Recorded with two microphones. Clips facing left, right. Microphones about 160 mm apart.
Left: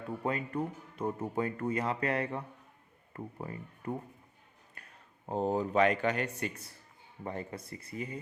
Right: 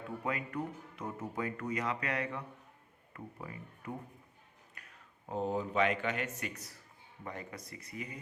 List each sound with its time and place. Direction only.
0.3 s speech: 30° left (ahead or behind)
5.3 s speech: 35° left (ahead or behind)